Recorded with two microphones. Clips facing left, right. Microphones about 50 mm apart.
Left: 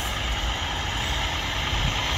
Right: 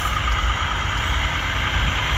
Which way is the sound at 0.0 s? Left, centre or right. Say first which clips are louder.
Right 7 dB; right.